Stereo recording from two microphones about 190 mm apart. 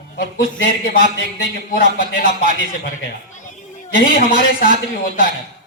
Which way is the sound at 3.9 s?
45° left (ahead or behind).